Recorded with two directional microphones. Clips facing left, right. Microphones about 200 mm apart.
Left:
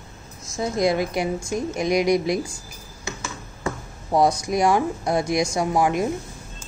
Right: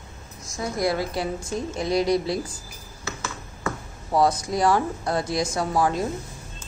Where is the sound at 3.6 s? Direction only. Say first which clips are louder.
Left 1 dB; 20° left (ahead or behind).